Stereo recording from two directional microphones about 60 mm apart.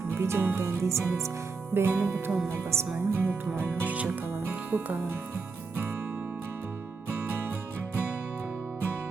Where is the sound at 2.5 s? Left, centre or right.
Right.